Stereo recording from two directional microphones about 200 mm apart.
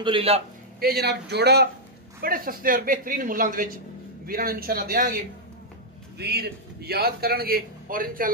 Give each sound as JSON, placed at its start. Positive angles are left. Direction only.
{"t": 0.0, "sound": "a man's voice", "side_deg": -25}
{"t": 0.7, "sound": "a man's voice", "side_deg": -50}